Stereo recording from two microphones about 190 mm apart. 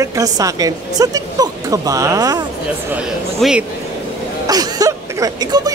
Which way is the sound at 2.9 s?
5° right (ahead or behind).